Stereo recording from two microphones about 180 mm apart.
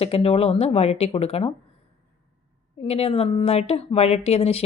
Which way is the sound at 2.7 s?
35° left (ahead or behind).